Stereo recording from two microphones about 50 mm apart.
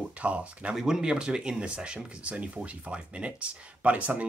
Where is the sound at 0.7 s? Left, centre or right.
Centre.